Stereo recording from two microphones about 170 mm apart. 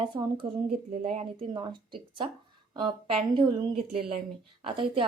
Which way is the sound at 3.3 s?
40° right (ahead or behind).